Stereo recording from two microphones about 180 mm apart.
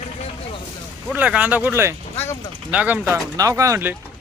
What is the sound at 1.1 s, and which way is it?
Speech, 10° right (ahead or behind).